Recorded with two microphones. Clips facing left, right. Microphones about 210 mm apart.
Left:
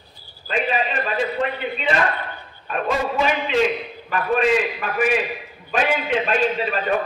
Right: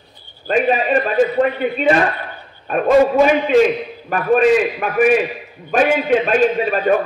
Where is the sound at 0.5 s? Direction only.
50° right (ahead or behind).